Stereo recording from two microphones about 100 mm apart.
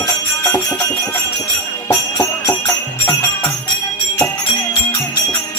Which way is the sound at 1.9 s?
35° left (ahead or behind).